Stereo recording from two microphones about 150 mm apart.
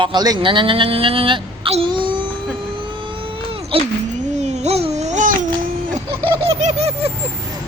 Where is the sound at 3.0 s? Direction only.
35° right (ahead or behind).